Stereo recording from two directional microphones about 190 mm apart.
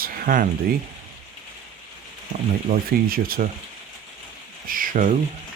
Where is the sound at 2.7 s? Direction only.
50° right (ahead or behind).